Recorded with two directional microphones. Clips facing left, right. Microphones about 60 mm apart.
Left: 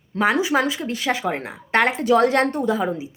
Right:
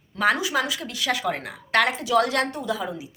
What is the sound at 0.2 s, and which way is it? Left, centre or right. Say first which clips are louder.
A woman's voice: left 3 dB; left.